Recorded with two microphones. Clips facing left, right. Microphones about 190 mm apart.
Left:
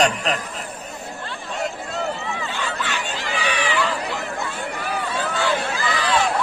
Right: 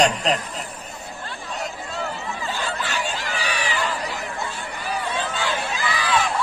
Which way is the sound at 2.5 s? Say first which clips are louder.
Even; 40° right (ahead or behind).